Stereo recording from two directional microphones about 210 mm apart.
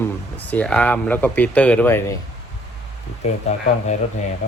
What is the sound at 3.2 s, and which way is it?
Speech, 35° left (ahead or behind).